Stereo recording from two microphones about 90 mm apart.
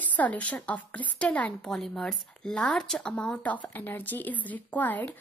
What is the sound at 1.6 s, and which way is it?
Speech, 5° left (ahead or behind).